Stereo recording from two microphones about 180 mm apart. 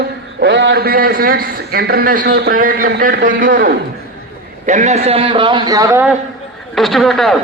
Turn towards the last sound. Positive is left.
turn(degrees=0)  # may be behind; listen again after turning